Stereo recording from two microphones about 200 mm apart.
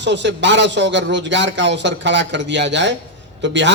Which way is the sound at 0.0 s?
60° right (ahead or behind).